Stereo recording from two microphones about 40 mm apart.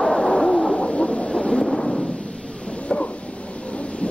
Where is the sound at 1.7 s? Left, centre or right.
Centre.